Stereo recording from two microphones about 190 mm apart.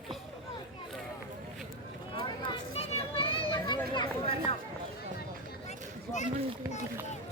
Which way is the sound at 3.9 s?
30° left (ahead or behind).